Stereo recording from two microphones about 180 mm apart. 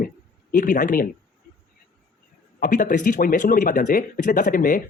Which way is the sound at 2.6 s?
45° left (ahead or behind).